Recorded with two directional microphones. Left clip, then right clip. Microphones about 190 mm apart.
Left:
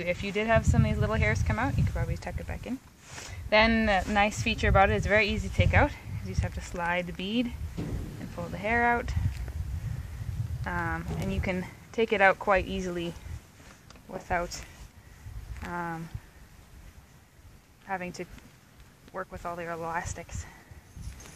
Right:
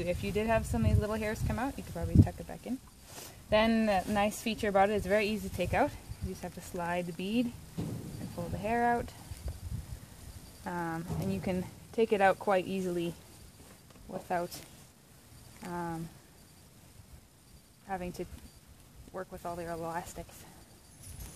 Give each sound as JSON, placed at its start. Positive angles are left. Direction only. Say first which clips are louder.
{"t": 0.0, "sound": "speech", "louder": "left 3 dB", "side_deg": -35}
{"t": 8.5, "sound": "speech", "louder": "left 4 dB", "side_deg": -30}
{"t": 10.6, "sound": "speech", "louder": "left 5 dB", "side_deg": -30}
{"t": 14.3, "sound": "speech", "louder": "left 4 dB", "side_deg": -35}
{"t": 15.7, "sound": "speech", "louder": "left 4 dB", "side_deg": -30}
{"t": 17.8, "sound": "speech", "louder": "left 4 dB", "side_deg": -35}